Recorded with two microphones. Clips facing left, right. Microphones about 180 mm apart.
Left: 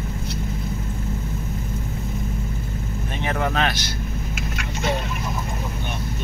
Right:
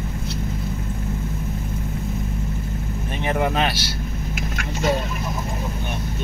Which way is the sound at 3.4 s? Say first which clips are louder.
Right 1 dB; 5° right (ahead or behind).